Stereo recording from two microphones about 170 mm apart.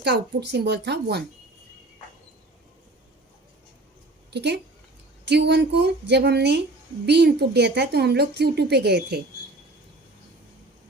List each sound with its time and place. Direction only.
0.0 s speech: 80° right
4.3 s a woman's voice: 80° right